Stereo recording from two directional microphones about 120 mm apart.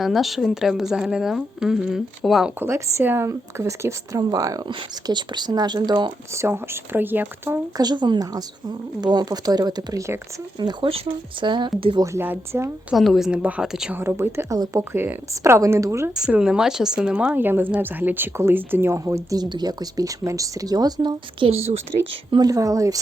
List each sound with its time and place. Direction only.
0.0 s a woman's voice: centre (ahead or behind)
2.6 s speech: 20° right (ahead or behind)
4.7 s speech: 40° right (ahead or behind)
6.3 s speech: 20° right (ahead or behind)
7.8 s speech: 35° right (ahead or behind)
10.6 s speech: 40° right (ahead or behind)
12.0 s speech: 20° right (ahead or behind)
12.9 s a woman's voice: centre (ahead or behind)
13.9 s speech: 20° right (ahead or behind)
16.1 s speech: 5° right (ahead or behind); by 22.4 s 55° right (ahead or behind)
22.4 s speech: 30° right (ahead or behind)